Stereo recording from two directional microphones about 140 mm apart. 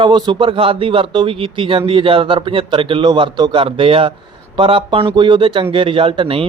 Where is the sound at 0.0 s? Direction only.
30° right (ahead or behind).